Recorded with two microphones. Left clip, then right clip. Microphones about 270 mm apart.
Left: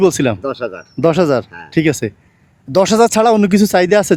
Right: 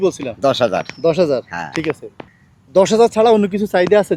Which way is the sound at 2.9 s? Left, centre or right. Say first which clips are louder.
Left 2 dB; left.